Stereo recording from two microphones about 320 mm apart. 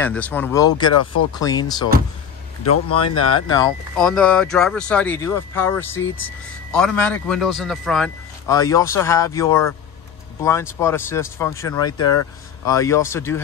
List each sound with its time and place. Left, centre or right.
0.0 s speech: centre
0.9 s speech: left
1.3 s speech: centre
2.6 s speech: left
3.4 s speech: centre